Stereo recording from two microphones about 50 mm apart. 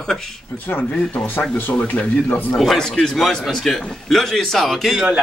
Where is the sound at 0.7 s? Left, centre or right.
Left.